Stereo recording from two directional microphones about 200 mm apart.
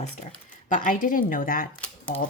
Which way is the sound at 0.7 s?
40° left (ahead or behind).